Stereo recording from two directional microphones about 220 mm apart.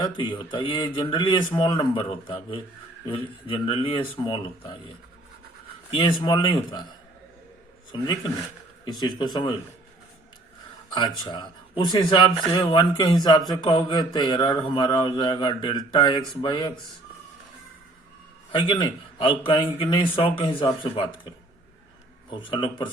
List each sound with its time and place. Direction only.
0.0 s speech: 20° left (ahead or behind)
5.9 s speech: 25° left (ahead or behind)
8.8 s speech: 20° left (ahead or behind)
10.9 s speech: 20° left (ahead or behind)
18.5 s speech: 20° left (ahead or behind)
22.3 s speech: 20° left (ahead or behind)